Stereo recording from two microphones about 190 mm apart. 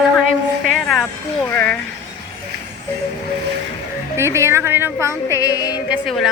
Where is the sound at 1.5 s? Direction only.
5° left (ahead or behind).